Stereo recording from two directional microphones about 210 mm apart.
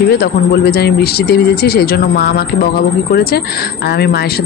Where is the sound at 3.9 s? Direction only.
50° left (ahead or behind).